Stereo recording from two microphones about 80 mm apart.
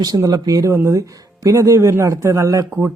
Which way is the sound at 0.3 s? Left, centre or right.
Right.